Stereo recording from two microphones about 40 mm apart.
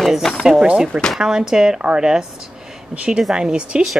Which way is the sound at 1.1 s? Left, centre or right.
Centre.